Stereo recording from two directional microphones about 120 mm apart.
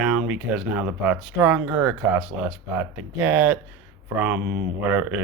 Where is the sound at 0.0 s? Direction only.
10° right (ahead or behind).